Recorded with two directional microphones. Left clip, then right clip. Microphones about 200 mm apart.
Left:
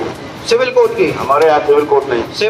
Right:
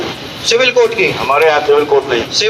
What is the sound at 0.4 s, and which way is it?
A man's voice, 55° left (ahead or behind).